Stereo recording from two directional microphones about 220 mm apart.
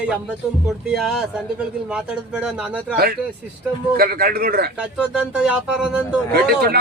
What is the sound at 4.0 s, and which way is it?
Speech, 40° right (ahead or behind).